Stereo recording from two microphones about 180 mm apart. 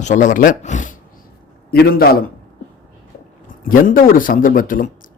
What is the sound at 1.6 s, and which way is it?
Speech, 55° left (ahead or behind).